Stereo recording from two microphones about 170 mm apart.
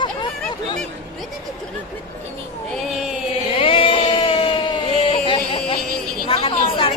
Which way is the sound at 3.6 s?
30° left (ahead or behind).